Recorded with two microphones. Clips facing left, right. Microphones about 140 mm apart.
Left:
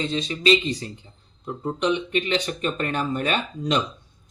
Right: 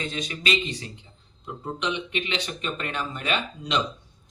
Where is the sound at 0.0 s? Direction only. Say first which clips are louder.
Left 7 dB; 30° left (ahead or behind).